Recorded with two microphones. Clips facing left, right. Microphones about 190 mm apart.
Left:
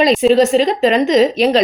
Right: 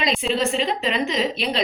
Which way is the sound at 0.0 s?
40° left (ahead or behind).